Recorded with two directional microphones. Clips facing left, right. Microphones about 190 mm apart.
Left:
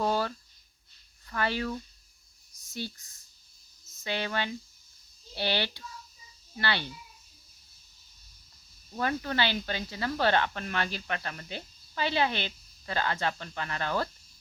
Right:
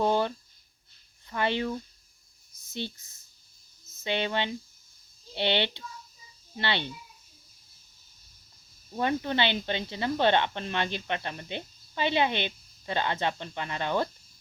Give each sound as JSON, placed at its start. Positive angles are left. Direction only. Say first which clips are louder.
{"t": 0.0, "sound": "a sound", "louder": "right 3 dB", "side_deg": -20}
{"t": 1.3, "sound": "speech", "louder": "right 2 dB", "side_deg": -20}
{"t": 8.9, "sound": "speech", "louder": "right 3 dB", "side_deg": -20}